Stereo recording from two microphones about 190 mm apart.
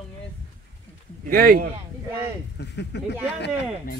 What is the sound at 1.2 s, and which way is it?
Speech, 50° right (ahead or behind).